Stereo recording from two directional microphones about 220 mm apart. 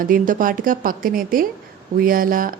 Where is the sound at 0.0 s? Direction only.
40° right (ahead or behind).